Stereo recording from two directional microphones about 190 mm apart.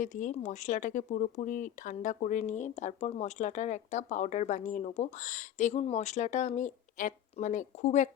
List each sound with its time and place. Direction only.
0.0 s speech: 40° left (ahead or behind)